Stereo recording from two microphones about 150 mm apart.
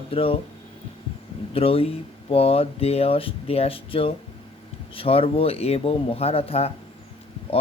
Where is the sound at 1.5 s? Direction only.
40° left (ahead or behind).